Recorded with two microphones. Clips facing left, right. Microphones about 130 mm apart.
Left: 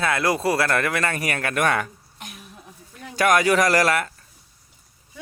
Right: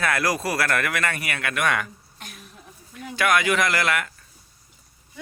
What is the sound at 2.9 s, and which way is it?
Speech, 40° left (ahead or behind).